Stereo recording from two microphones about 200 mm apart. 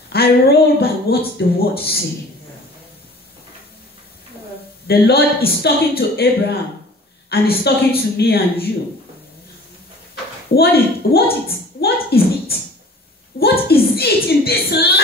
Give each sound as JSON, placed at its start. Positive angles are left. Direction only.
{"t": 0.1, "sound": "speech", "side_deg": 50}
{"t": 4.8, "sound": "speech", "side_deg": 50}
{"t": 7.2, "sound": "speech", "side_deg": 50}
{"t": 10.5, "sound": "speech", "side_deg": 50}